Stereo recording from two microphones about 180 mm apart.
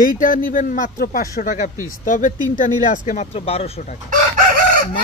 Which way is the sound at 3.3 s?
35° left (ahead or behind).